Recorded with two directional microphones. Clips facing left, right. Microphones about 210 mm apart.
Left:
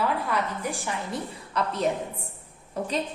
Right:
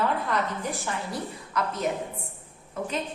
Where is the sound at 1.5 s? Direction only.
30° left (ahead or behind).